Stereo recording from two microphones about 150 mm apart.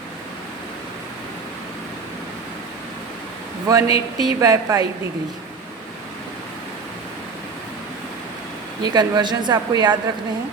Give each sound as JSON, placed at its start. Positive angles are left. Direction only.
{"t": 3.7, "sound": "a woman's voice", "side_deg": -25}
{"t": 8.8, "sound": "a woman's voice", "side_deg": -25}